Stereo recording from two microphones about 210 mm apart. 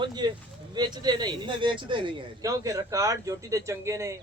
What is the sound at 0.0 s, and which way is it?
A man's voice, 20° right (ahead or behind).